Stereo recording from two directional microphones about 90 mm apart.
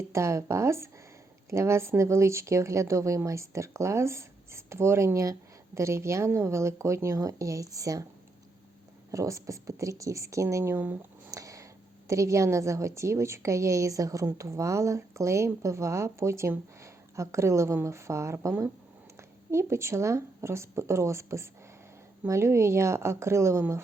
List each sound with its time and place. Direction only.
0.1 s speech: 35° right (ahead or behind)
9.1 s speech: 35° right (ahead or behind)
11.3 s a sound: 40° right (ahead or behind)
12.0 s speech: 35° right (ahead or behind)